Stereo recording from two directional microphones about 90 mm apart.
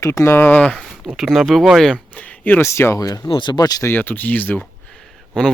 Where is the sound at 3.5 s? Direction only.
45° left (ahead or behind).